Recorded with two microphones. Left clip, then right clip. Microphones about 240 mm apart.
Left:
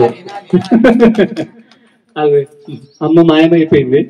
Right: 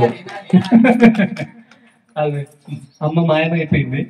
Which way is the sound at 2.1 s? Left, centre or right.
Left.